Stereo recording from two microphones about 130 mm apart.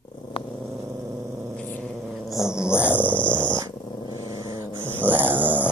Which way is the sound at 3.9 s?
35° left (ahead or behind).